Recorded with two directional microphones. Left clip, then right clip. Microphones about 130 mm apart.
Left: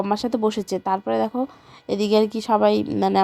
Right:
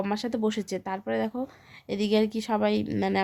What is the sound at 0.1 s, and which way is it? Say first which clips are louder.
A woman's voice: left 7 dB; 35° left (ahead or behind).